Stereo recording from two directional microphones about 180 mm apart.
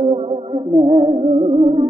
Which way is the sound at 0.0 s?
35° right (ahead or behind).